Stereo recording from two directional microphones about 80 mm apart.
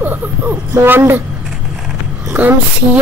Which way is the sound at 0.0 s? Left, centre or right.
Right.